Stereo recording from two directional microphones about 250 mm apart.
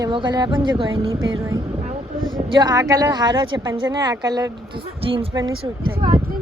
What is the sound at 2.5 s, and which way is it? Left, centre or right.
A woman's voice, centre.